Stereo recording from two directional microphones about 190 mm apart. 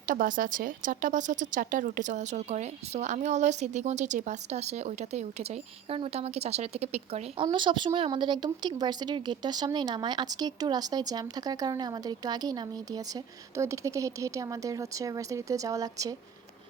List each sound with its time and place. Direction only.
0.0 s a woman's voice: 45° right (ahead or behind); by 16.1 s 20° right (ahead or behind)